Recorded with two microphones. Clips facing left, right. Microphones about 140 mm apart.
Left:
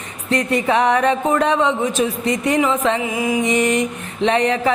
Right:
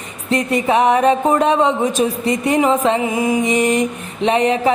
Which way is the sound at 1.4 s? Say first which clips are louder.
Right 2 dB; 30° right (ahead or behind).